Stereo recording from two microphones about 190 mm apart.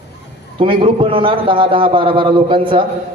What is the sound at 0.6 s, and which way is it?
A man's voice, 25° right (ahead or behind).